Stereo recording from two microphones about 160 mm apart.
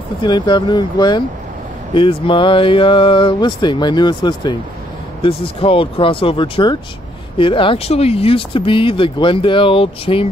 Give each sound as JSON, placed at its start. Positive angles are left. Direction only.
{"t": 0.2, "sound": "speech", "side_deg": 25}